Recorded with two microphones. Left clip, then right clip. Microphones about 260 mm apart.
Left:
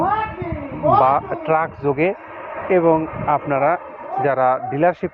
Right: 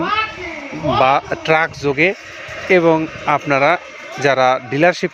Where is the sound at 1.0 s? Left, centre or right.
Right.